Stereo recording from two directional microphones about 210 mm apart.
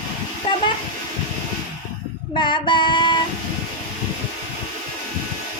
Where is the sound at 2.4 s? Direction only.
20° left (ahead or behind).